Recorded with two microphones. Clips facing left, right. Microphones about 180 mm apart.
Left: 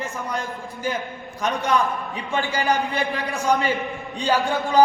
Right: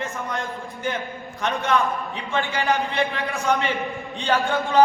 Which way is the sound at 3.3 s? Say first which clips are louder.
Left 2 dB; 35° left (ahead or behind).